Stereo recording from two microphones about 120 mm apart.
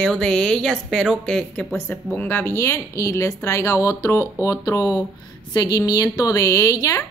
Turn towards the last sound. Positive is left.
turn(degrees=30)  # may be behind; listen again after turning